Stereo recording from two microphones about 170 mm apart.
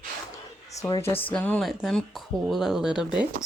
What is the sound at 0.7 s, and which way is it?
Speech, 20° left (ahead or behind).